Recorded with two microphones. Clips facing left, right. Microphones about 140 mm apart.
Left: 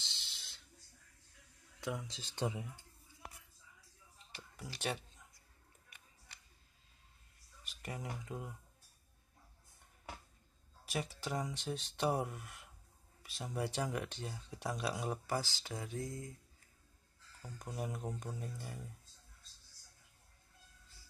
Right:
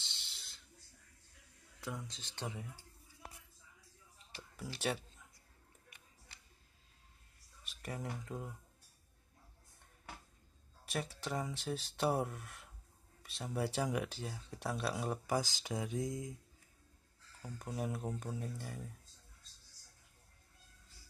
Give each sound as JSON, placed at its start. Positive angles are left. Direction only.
{"t": 0.0, "sound": "a sound", "side_deg": 0}
{"t": 2.0, "sound": "speech", "side_deg": 15}
{"t": 4.4, "sound": "speech", "side_deg": 0}
{"t": 7.6, "sound": "speech", "side_deg": 0}
{"t": 10.9, "sound": "speech", "side_deg": 0}
{"t": 15.2, "sound": "speech", "side_deg": -15}
{"t": 17.4, "sound": "speech", "side_deg": -5}